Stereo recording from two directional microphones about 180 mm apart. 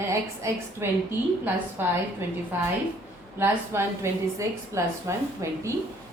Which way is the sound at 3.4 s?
15° right (ahead or behind).